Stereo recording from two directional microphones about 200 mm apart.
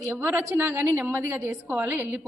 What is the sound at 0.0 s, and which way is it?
A woman's voice, 10° right (ahead or behind).